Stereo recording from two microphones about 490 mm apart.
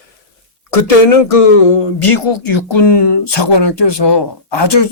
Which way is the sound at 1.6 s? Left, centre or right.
Left.